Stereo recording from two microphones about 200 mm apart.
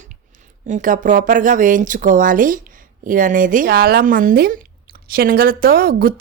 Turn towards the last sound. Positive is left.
turn(degrees=-45)  # may be behind; listen again after turning